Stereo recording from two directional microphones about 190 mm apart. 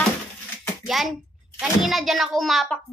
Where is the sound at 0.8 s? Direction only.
Centre (ahead or behind).